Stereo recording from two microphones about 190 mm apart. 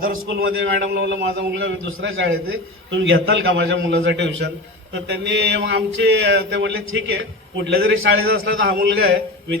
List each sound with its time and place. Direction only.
0.0 s a man's voice: 50° right (ahead or behind)
0.6 s a man's voice: 75° right (ahead or behind)
5.0 s a sound: 65° right (ahead or behind)